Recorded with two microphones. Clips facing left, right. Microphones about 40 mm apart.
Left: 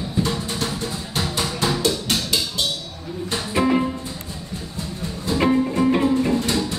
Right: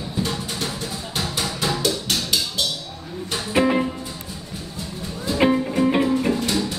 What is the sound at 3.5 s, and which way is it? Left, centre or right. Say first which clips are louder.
Music: right 1 dB; centre.